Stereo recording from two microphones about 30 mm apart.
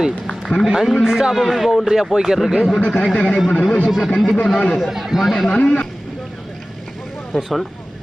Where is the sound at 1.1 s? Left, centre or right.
Right.